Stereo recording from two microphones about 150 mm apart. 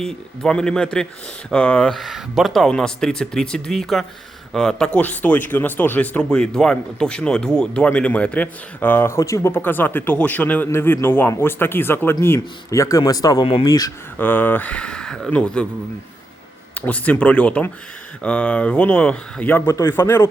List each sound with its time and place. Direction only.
0.0 s speech: 5° left (ahead or behind); by 13.9 s 25° left (ahead or behind)
14.2 s speech: 15° left (ahead or behind)
16.7 s speech: 10° left (ahead or behind)